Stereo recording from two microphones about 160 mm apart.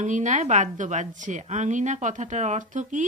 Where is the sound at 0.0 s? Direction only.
50° right (ahead or behind).